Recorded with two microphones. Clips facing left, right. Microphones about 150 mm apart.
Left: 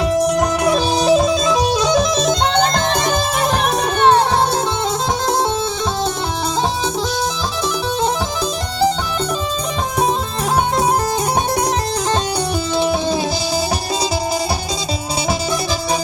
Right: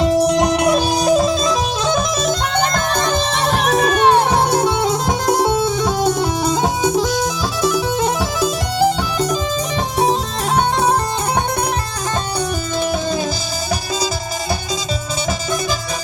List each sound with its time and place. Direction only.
1.0 s music: 40° right (ahead or behind)
2.7 s music: 20° left (ahead or behind)
3.8 s music: 5° right (ahead or behind)